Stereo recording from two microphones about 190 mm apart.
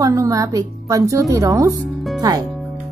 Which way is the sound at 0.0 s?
15° right (ahead or behind).